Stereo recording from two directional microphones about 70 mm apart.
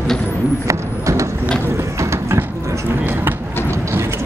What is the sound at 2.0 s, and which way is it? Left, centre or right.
Clip-clop, right.